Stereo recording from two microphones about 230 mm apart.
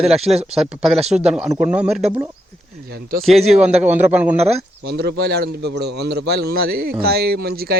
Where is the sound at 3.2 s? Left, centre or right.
Centre.